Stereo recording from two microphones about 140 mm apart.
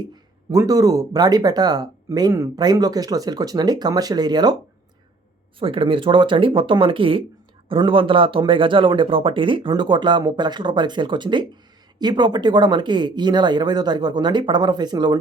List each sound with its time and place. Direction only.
0.5 s speech: 25° right (ahead or behind)
5.5 s speech: 40° right (ahead or behind)